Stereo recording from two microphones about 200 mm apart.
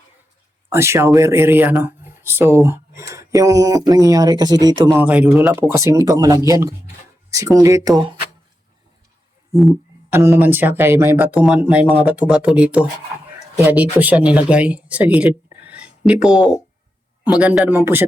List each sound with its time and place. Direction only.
0.7 s speech: 15° right (ahead or behind)
4.9 s speech: 5° right (ahead or behind); by 8.2 s 20° right (ahead or behind)
10.1 s speech: 10° right (ahead or behind)